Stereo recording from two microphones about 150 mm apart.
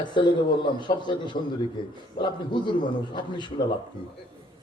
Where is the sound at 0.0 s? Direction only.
30° left (ahead or behind).